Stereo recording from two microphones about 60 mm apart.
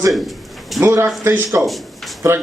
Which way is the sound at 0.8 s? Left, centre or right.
Right.